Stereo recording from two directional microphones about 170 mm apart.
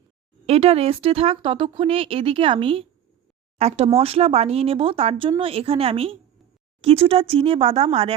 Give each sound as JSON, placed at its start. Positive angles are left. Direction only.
{"t": 0.4, "sound": "speech", "side_deg": -35}